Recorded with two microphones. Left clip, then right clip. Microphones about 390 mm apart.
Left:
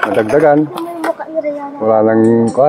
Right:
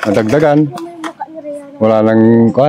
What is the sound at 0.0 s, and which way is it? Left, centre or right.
Speech, right.